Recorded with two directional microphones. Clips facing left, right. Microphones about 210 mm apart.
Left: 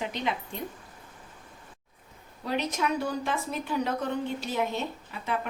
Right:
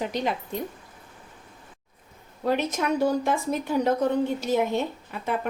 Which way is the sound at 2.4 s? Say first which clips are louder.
Right 4 dB; 50° right (ahead or behind).